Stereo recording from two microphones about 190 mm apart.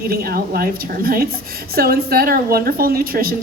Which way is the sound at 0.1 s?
50° right (ahead or behind).